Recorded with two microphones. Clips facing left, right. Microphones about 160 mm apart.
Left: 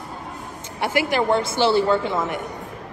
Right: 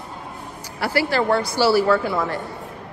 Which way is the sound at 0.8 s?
20° left (ahead or behind).